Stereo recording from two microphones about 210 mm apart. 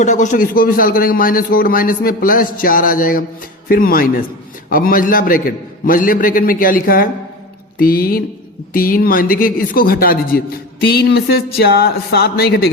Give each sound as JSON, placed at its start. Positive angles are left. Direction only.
{"t": 0.0, "sound": "a man's voice", "side_deg": 35}